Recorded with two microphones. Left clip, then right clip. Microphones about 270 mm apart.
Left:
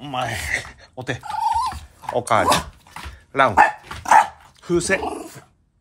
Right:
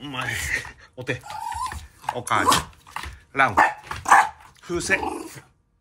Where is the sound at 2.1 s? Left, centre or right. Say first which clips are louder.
Left 5 dB; centre.